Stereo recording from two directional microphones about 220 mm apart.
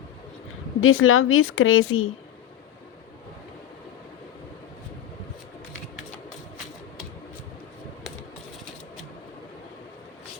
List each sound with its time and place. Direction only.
0.8 s speech: 65° left (ahead or behind)